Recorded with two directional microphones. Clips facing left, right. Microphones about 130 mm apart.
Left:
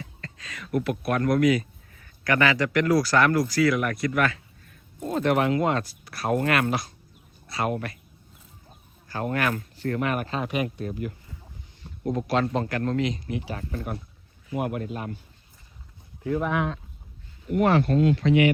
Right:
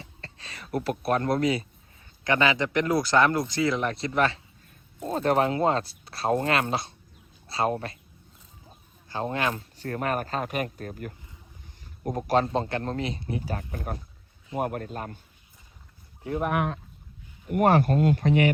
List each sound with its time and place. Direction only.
0.0 s speech: 35° right (ahead or behind)
9.0 s speech: 20° right (ahead or behind)
9.8 s speech: 40° right (ahead or behind)
12.1 s a man's voice: 35° right (ahead or behind)
16.2 s speech: 25° right (ahead or behind)
17.6 s speech: 45° right (ahead or behind)